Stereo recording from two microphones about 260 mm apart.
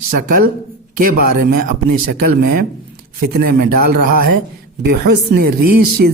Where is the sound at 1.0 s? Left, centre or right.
Right.